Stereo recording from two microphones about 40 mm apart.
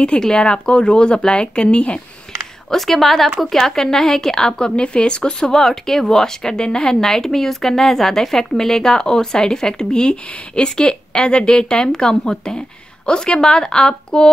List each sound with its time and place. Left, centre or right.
0.2 s a woman's voice: centre
2.7 s speech: centre; by 5.5 s left
5.5 s a woman's voice: centre